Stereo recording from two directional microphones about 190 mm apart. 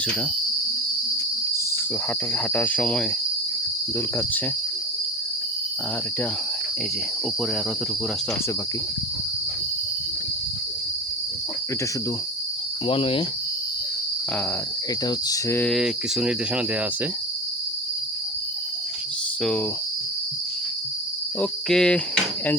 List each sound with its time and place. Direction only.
2.3 s cricket: 10° left (ahead or behind)
12.9 s cricket: 30° left (ahead or behind)
15.0 s cricket: 15° left (ahead or behind)
15.7 s cricket: 5° right (ahead or behind)
19.4 s cricket: 5° left (ahead or behind)
21.4 s cricket: 5° left (ahead or behind)